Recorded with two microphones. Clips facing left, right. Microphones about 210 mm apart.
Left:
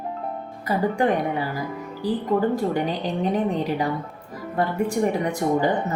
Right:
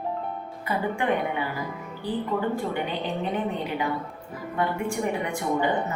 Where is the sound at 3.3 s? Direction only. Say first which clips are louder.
Left 5 dB; 40° left (ahead or behind).